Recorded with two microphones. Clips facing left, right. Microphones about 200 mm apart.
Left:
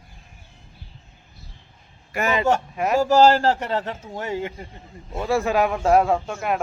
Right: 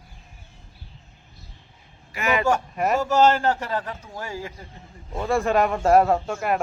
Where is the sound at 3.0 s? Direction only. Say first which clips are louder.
Left 4 dB; 35° left (ahead or behind).